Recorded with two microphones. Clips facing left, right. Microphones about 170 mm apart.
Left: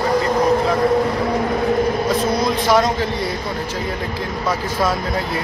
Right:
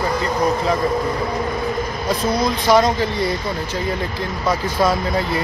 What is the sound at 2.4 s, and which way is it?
Speech, centre (ahead or behind).